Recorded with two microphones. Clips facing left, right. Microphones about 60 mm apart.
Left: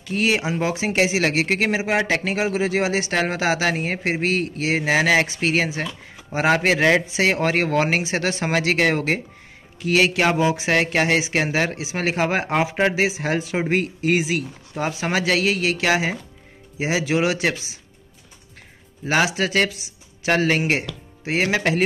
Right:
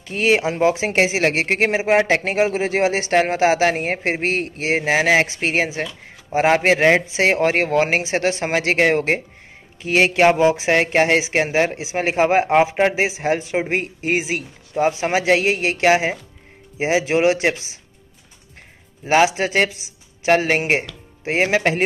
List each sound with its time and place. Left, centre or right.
0.0 s speech: right
19.0 s speech: right